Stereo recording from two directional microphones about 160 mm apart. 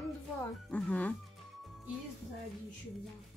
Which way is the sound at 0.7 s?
10° left (ahead or behind).